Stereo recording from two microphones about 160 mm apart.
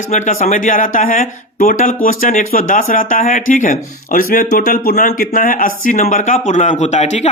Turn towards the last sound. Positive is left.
turn(degrees=45)  # may be behind; listen again after turning